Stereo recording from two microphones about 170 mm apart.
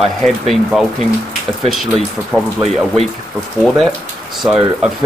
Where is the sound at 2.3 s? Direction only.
Centre (ahead or behind).